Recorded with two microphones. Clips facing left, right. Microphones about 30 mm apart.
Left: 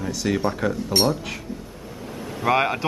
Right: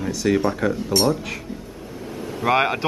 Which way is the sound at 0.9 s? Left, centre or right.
Left.